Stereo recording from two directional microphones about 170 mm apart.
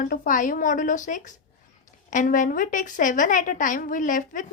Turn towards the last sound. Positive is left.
turn(degrees=50)  # may be behind; listen again after turning